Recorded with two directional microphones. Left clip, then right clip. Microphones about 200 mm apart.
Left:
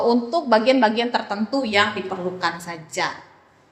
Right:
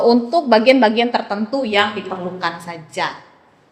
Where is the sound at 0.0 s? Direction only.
15° right (ahead or behind); by 1.9 s 15° left (ahead or behind).